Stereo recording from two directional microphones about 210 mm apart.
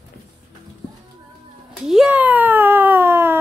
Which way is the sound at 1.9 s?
5° right (ahead or behind).